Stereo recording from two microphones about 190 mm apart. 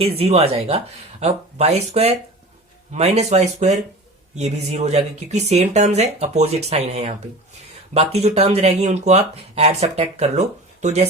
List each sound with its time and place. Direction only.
0.0 s speech: 30° right (ahead or behind)